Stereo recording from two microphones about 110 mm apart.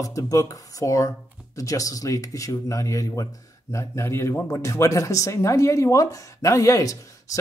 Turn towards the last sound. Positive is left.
turn(degrees=30)  # may be behind; listen again after turning